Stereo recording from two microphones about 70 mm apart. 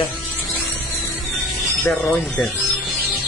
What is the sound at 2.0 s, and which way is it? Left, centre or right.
Speech, left.